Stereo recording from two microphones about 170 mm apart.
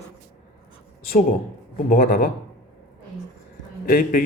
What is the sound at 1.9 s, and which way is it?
Speech, 60° left (ahead or behind).